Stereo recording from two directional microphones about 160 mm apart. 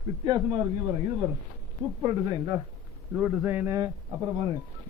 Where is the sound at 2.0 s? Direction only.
25° right (ahead or behind).